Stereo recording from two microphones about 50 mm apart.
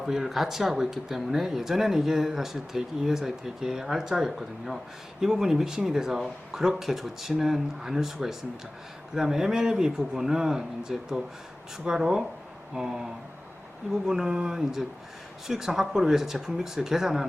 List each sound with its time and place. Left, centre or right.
0.0 s speech: centre